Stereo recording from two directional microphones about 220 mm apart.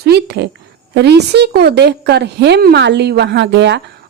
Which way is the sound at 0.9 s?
50° right (ahead or behind).